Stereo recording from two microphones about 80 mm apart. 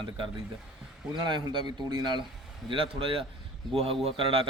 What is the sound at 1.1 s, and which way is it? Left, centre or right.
Speech, right.